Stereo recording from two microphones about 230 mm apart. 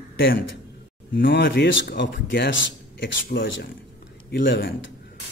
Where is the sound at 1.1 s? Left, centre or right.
Left.